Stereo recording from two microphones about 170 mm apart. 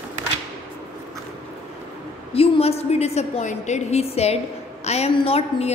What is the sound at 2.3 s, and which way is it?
A woman's voice, 35° left (ahead or behind).